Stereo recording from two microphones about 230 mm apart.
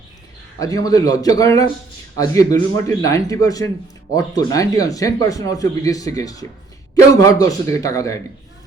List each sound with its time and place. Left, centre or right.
0.6 s a man's voice: centre